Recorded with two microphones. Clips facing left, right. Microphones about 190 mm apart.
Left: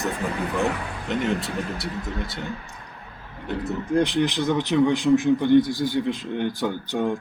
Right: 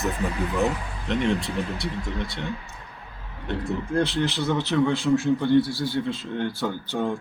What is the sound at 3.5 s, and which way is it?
Speech, centre (ahead or behind).